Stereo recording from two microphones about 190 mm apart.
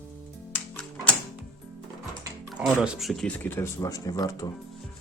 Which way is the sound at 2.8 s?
Centre (ahead or behind).